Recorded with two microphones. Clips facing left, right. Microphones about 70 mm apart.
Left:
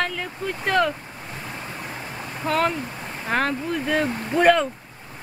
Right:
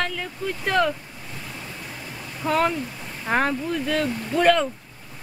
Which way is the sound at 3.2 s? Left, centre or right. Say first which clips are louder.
Right 1 dB; centre.